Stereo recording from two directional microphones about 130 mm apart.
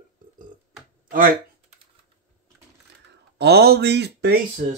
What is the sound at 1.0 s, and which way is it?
Speech, 90° right.